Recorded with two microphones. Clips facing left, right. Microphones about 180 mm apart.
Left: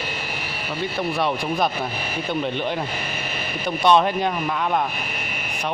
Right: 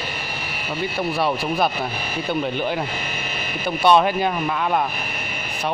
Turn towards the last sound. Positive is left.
turn(degrees=-5)  # may be behind; listen again after turning